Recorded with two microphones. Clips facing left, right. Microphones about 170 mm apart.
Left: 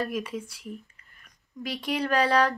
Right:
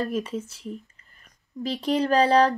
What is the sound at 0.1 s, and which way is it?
Speech, 35° right (ahead or behind).